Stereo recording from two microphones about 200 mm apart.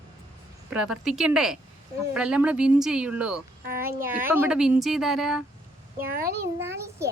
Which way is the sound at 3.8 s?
45° right (ahead or behind).